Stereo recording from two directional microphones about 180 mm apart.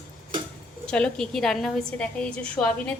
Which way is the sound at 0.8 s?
5° left (ahead or behind).